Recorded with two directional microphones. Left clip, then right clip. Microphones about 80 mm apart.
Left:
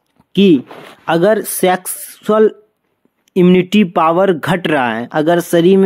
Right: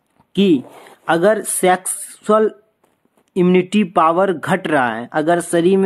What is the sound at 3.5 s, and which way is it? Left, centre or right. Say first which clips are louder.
Speech: left 2 dB; left.